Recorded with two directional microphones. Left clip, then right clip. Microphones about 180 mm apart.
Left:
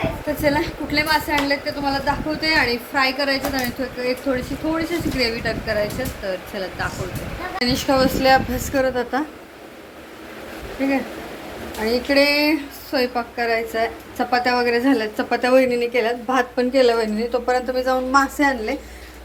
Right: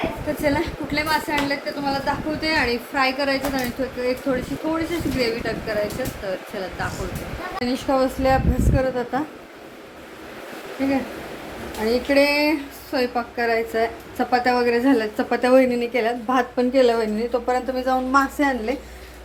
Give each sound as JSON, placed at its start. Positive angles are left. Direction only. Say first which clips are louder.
{"t": 0.4, "sound": "a woman's voice", "louder": "left 3 dB", "side_deg": -5}
{"t": 10.8, "sound": "a woman's voice", "louder": "left 1 dB", "side_deg": -5}
{"t": 13.3, "sound": "a woman's voice", "louder": "even", "side_deg": -20}